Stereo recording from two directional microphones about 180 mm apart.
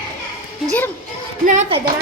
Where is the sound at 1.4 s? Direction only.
40° right (ahead or behind).